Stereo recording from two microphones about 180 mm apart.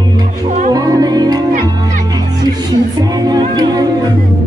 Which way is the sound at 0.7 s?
20° right (ahead or behind).